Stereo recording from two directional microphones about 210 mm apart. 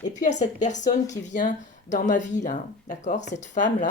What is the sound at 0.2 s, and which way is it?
Speech, 35° left (ahead or behind).